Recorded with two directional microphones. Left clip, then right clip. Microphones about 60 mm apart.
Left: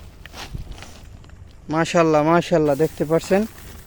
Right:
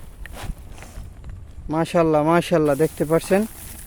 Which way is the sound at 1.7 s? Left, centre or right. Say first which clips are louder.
Left 1 dB; right.